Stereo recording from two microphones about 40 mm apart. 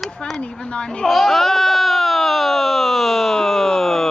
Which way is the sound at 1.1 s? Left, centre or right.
Centre.